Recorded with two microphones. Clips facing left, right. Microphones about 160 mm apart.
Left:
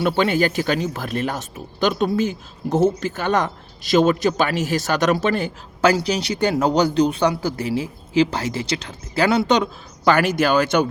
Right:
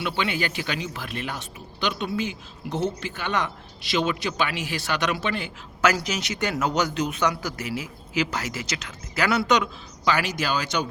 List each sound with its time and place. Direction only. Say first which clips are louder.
0.0 s a man's voice: left 8 dB; 45° left (ahead or behind)
5.9 s a man's voice: left 7 dB; 30° left (ahead or behind)
10.0 s speech: left 8 dB; 55° left (ahead or behind)